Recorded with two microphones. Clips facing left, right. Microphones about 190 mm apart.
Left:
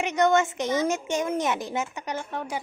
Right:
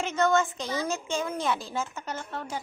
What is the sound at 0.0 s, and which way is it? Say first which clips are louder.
A woman's voice: left 3 dB; 15° left (ahead or behind).